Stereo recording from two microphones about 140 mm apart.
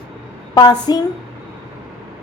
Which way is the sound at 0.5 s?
30° left (ahead or behind).